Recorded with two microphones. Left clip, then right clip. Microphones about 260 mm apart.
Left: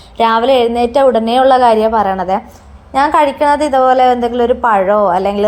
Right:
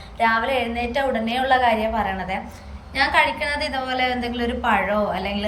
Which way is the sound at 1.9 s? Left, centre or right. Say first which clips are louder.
Left 11 dB; left.